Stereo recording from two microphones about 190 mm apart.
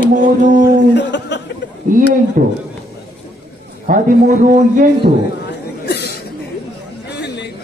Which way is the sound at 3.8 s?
45° right (ahead or behind).